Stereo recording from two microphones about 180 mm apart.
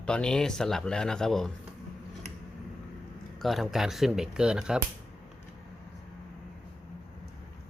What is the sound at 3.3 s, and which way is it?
Speech, centre (ahead or behind).